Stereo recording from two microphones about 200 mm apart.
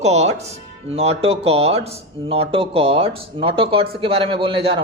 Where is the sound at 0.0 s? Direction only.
35° right (ahead or behind).